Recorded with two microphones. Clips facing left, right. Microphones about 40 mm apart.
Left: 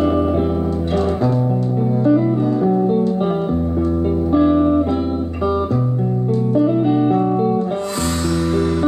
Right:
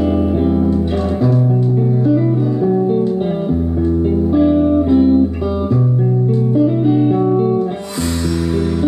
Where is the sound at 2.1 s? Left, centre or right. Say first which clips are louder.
Even; centre.